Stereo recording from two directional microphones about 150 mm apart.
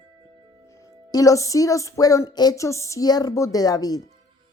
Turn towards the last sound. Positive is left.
turn(degrees=25)  # may be behind; listen again after turning